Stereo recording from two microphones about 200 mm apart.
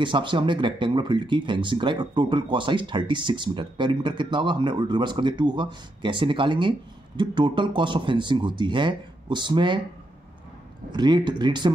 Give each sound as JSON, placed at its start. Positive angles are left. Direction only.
{"t": 0.0, "sound": "speech", "side_deg": -25}
{"t": 10.9, "sound": "speech", "side_deg": -20}